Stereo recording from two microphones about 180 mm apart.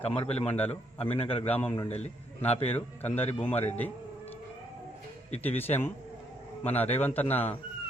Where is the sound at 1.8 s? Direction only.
35° left (ahead or behind).